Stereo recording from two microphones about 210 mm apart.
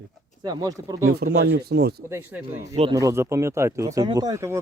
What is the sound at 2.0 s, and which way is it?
Speech, 10° right (ahead or behind).